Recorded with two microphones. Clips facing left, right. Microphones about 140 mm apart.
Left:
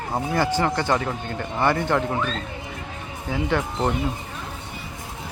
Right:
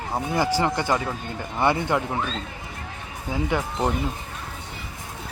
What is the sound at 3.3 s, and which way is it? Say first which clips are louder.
Speech: left 1 dB; 10° right (ahead or behind).